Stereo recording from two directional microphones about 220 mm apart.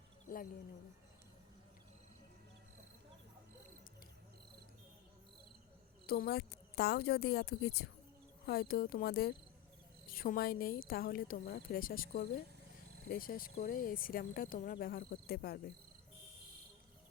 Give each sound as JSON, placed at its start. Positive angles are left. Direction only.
{"t": 6.1, "sound": "a woman's voice", "side_deg": 45}